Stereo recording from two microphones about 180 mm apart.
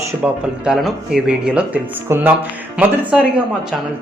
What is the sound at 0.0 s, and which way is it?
Speech, 5° right (ahead or behind).